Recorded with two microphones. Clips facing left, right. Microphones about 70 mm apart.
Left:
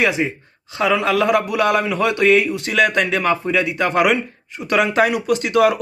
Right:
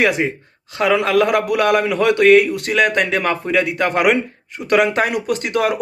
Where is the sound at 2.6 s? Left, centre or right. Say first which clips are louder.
Right 1 dB; right.